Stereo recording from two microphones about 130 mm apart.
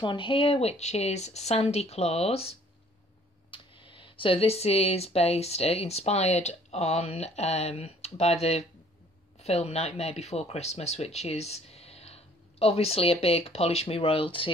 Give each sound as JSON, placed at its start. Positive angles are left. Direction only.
{"t": 0.0, "sound": "speech", "side_deg": 40}
{"t": 3.5, "sound": "speech", "side_deg": 40}